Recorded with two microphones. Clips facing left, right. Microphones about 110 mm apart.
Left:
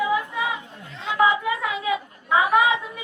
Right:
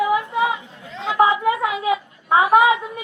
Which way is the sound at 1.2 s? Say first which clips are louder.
Right 3 dB; 35° right (ahead or behind).